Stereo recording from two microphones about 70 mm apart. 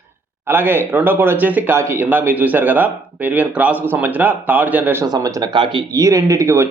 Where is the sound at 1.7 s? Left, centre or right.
Right.